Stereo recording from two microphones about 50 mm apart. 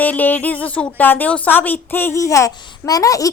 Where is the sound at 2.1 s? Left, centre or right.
Left.